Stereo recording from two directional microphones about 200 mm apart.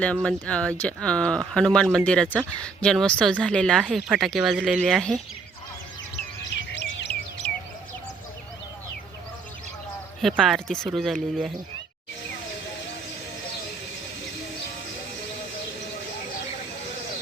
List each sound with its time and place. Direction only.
0.0 s speech: 5° left (ahead or behind)
6.6 s chirp: 60° left (ahead or behind)
10.2 s speech: centre (ahead or behind)